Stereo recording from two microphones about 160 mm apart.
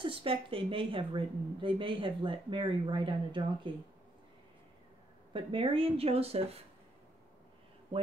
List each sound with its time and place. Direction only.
0.0 s speech: 35° right (ahead or behind)
5.3 s speech: 35° right (ahead or behind)